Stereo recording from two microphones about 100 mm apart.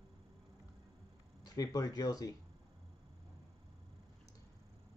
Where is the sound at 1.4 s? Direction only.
40° left (ahead or behind).